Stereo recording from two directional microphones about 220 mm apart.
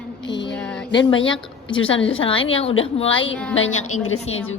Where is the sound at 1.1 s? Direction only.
60° left (ahead or behind).